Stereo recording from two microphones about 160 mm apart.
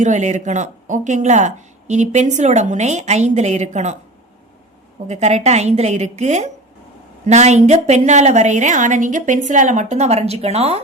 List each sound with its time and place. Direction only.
0.0 s speech: 50° right (ahead or behind)
5.0 s speech: 45° right (ahead or behind)